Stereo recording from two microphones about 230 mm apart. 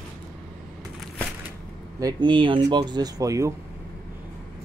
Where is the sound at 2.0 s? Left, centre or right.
Right.